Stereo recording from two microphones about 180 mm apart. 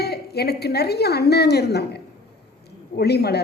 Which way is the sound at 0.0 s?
60° left (ahead or behind).